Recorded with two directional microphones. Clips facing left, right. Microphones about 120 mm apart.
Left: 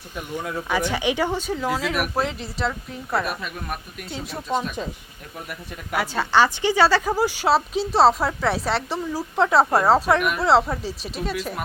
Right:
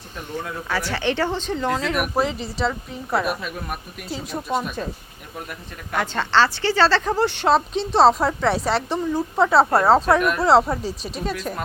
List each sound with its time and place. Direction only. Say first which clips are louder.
0.2 s speech: left 1 dB; 15° left (ahead or behind); by 4.8 s 10° right (ahead or behind)
5.9 s speech: even; 10° left (ahead or behind)
9.6 s speech: right 2 dB; 10° left (ahead or behind)